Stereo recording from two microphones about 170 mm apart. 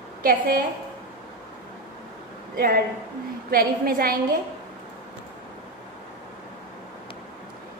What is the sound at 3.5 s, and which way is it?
Speech, 60° right (ahead or behind).